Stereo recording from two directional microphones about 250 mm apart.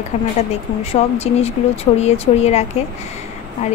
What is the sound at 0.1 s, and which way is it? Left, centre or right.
Speech, left.